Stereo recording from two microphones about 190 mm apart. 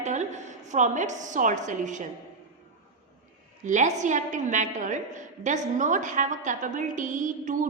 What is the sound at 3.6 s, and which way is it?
A woman's voice, 40° right (ahead or behind).